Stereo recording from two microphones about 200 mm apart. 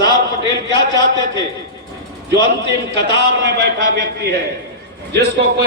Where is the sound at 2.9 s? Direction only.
60° right (ahead or behind).